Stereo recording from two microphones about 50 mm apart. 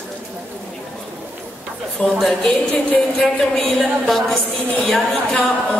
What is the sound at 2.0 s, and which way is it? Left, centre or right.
Speech, left.